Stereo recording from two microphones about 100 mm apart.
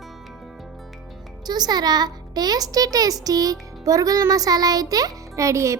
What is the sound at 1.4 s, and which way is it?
A child's voice, 45° right (ahead or behind).